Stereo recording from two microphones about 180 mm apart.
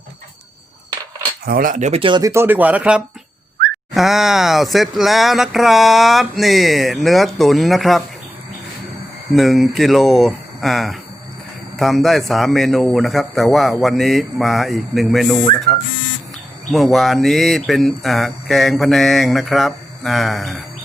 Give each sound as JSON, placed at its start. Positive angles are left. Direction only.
{"t": 1.5, "sound": "speech", "side_deg": -50}
{"t": 9.3, "sound": "speech", "side_deg": 0}
{"t": 16.7, "sound": "speech", "side_deg": 0}